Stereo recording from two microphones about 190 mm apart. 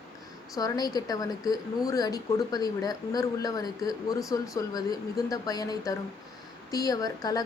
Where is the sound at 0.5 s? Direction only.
20° left (ahead or behind).